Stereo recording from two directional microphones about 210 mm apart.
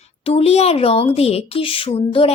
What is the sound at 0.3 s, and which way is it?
Speech, 30° left (ahead or behind).